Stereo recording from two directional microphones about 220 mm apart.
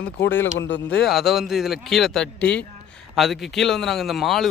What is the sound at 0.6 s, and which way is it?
Speech, 55° left (ahead or behind).